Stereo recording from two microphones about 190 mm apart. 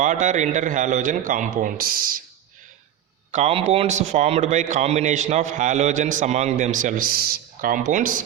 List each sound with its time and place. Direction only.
0.0 s a man's voice: 40° right (ahead or behind)
3.3 s a man's voice: 35° right (ahead or behind)